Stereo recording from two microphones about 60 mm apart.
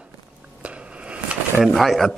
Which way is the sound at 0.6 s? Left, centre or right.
Centre.